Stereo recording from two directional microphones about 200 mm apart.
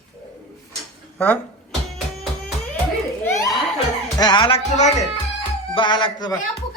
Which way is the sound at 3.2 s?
15° left (ahead or behind).